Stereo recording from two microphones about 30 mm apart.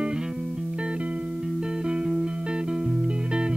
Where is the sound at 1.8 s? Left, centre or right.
Right.